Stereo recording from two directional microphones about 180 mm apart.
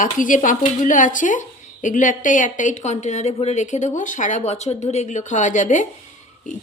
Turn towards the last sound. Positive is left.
turn(degrees=40)  # may be behind; listen again after turning